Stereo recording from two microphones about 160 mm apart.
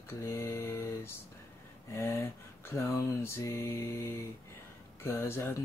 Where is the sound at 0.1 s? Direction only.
15° left (ahead or behind).